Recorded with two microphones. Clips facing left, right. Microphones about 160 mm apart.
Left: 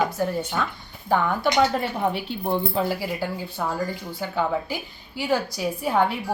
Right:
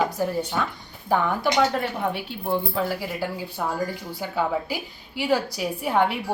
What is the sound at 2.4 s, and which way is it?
Speech, 25° left (ahead or behind).